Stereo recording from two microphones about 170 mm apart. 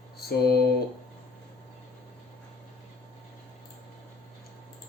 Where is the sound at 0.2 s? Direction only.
65° left (ahead or behind).